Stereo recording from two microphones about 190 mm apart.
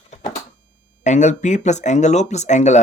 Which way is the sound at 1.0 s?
40° left (ahead or behind).